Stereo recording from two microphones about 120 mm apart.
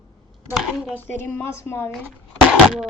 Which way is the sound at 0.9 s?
15° left (ahead or behind).